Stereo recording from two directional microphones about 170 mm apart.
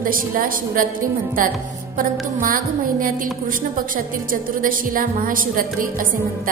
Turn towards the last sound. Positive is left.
turn(degrees=-55)  # may be behind; listen again after turning